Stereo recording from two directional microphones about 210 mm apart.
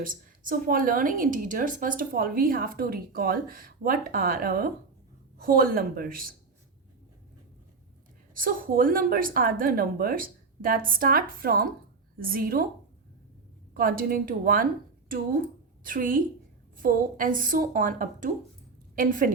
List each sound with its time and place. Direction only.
0.0 s speech: 40° right (ahead or behind)
8.3 s speech: 40° right (ahead or behind)
13.7 s a woman's voice: 40° right (ahead or behind)
15.8 s a woman's voice: 40° right (ahead or behind)